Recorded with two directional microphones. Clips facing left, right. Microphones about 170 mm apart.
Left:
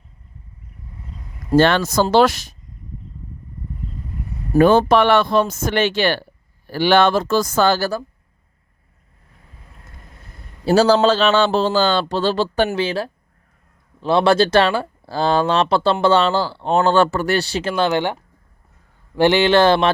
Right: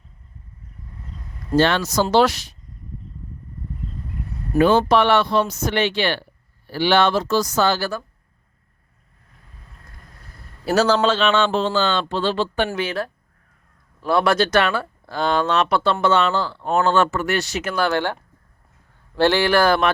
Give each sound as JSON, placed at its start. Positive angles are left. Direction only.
{"t": 1.5, "sound": "speech", "side_deg": 55}
{"t": 4.5, "sound": "speech", "side_deg": 50}
{"t": 10.7, "sound": "speech", "side_deg": 30}